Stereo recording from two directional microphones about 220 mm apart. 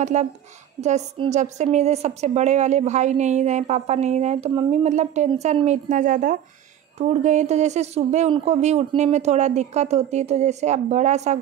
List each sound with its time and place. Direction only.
0.0 s a woman's voice: 30° right (ahead or behind)